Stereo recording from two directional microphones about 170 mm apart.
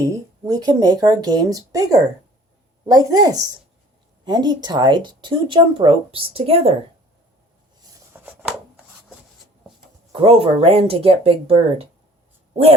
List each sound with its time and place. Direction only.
0.0 s speech: 20° right (ahead or behind); by 6.7 s 35° right (ahead or behind)
7.9 s a sound: 10° right (ahead or behind)
10.1 s speech: 35° right (ahead or behind)